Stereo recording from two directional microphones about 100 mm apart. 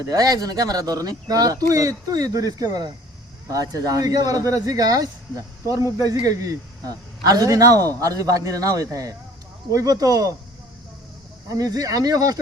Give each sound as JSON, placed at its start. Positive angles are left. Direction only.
{"t": 0.0, "sound": "a man's voice", "side_deg": -35}
{"t": 11.4, "sound": "a man's voice", "side_deg": -35}